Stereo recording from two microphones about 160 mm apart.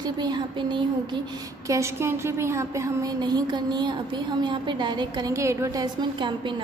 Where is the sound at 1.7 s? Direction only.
15° right (ahead or behind).